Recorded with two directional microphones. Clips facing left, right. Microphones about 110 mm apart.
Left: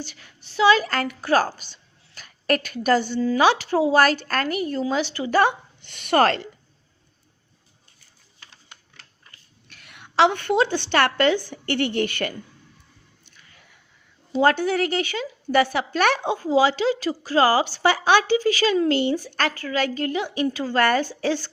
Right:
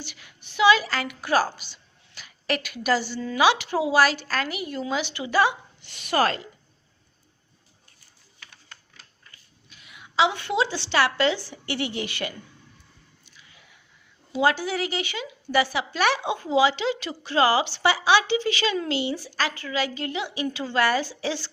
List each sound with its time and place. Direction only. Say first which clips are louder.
0.0 s a woman's voice: left 5 dB; 40° left (ahead or behind)
3.2 s a woman's voice: left 7 dB; 30° left (ahead or behind)
3.4 s a woman's voice: left 1 dB; 45° left (ahead or behind); by 6.5 s 65° left (ahead or behind)
9.6 s a woman's voice: left 1 dB; 70° left (ahead or behind); by 12.3 s 50° left (ahead or behind)
14.4 s a woman's voice: left 4 dB; 50° left (ahead or behind)
16.3 s a woman's voice: left 2 dB; 40° left (ahead or behind)